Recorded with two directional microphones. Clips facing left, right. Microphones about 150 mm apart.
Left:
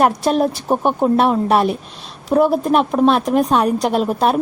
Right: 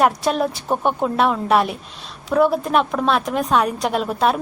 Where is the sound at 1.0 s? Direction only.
35° left (ahead or behind).